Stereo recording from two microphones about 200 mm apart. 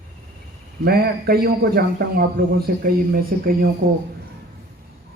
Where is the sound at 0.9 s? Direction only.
50° right (ahead or behind).